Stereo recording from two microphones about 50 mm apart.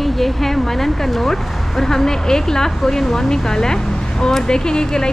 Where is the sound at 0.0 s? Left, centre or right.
Centre.